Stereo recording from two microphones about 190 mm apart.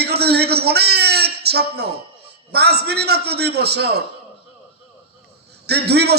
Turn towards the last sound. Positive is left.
turn(degrees=-60)  # may be behind; listen again after turning